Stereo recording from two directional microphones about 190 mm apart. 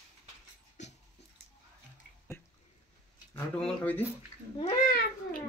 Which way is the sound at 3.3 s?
5° left (ahead or behind).